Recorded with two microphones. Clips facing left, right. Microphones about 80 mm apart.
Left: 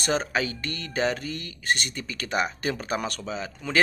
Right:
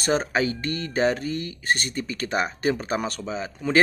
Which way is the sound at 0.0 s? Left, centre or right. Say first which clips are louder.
Right 3 dB; right.